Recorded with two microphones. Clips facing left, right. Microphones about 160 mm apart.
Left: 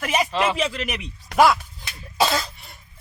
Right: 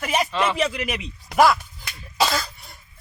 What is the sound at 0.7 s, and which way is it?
Speech, 15° right (ahead or behind).